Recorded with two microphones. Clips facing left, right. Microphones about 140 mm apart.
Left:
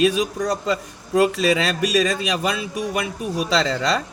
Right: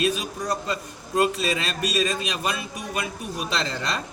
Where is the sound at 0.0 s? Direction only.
90° left.